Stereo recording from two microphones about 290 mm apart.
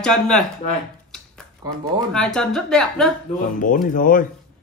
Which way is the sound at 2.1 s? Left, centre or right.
Centre.